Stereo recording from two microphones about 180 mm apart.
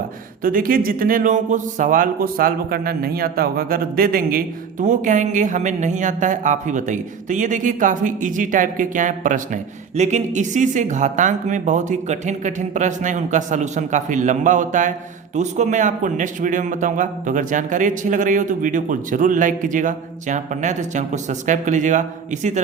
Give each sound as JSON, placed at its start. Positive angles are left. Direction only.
{"t": 0.4, "sound": "speech", "side_deg": -50}